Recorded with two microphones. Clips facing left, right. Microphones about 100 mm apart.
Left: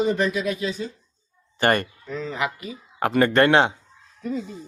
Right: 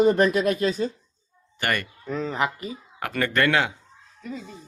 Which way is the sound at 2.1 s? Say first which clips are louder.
Right 3 dB; 40° right (ahead or behind).